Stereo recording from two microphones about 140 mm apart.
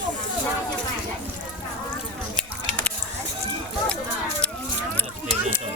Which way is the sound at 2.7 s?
10° left (ahead or behind).